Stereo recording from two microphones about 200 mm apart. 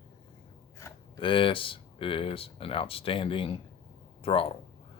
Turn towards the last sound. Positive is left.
turn(degrees=30)  # may be behind; listen again after turning